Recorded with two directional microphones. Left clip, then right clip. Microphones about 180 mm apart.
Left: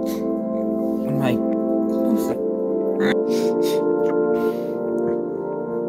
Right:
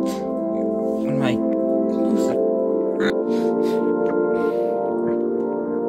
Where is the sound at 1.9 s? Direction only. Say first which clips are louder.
Right 1 dB; 10° left (ahead or behind).